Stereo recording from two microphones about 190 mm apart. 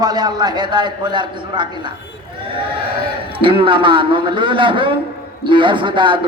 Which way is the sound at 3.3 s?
25° right (ahead or behind).